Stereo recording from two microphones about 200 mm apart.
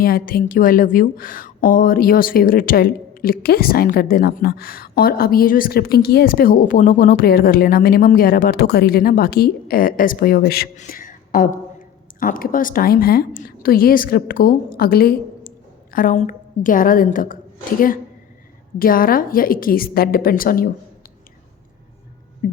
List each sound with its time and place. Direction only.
0.0 s a woman's voice: 45° left (ahead or behind)